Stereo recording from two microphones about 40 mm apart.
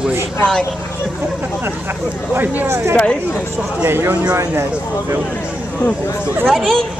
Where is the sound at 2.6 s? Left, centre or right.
Right.